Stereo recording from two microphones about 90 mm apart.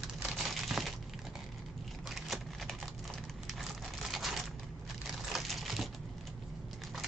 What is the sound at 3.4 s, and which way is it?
Crumpling, 5° right (ahead or behind).